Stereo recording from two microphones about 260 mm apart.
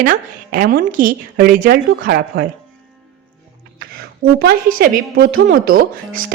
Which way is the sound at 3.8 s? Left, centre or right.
Right.